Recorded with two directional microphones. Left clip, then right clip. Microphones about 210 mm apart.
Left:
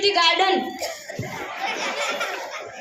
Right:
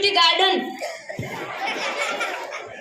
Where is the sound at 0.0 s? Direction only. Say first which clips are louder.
Right 1 dB; 30° right (ahead or behind).